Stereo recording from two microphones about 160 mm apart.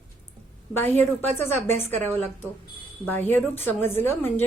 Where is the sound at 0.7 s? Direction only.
10° left (ahead or behind).